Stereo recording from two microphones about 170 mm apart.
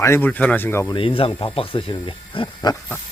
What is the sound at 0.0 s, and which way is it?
Speech, 15° left (ahead or behind).